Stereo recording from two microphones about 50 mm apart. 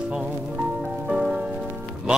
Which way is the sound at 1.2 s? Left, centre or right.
Centre.